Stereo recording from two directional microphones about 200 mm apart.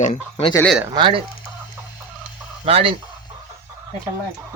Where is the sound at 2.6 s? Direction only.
30° right (ahead or behind).